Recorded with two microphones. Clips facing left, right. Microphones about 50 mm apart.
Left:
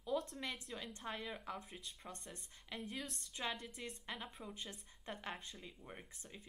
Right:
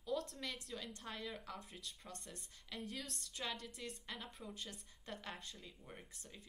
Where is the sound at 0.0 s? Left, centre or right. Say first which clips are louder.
Left 2 dB; left.